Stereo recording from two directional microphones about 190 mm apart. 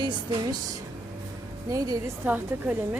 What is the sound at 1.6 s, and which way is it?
A woman's voice, 20° right (ahead or behind).